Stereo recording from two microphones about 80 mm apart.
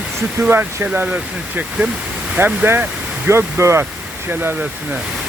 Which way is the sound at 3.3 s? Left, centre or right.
Right.